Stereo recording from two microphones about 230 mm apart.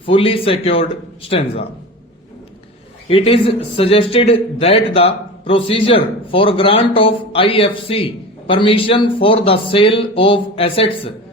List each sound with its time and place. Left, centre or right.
0.0 s a man's voice: left
3.1 s a man's voice: left